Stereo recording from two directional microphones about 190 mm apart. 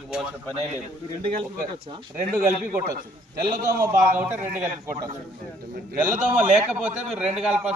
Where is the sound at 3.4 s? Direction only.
50° right (ahead or behind).